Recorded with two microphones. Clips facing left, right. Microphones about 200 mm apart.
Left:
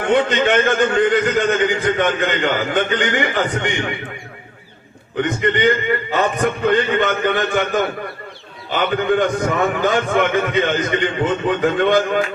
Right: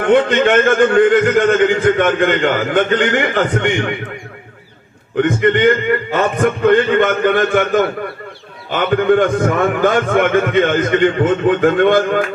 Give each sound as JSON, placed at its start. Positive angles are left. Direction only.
{"t": 0.0, "sound": "a man's voice", "side_deg": -50}
{"t": 5.1, "sound": "a man's voice", "side_deg": -50}